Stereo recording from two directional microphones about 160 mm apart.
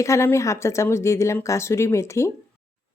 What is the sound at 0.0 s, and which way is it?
A woman's voice, 15° left (ahead or behind).